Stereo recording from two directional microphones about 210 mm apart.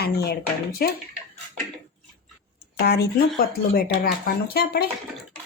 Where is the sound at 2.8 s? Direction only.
45° left (ahead or behind).